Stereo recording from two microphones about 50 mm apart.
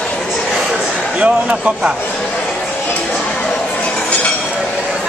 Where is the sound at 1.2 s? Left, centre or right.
Right.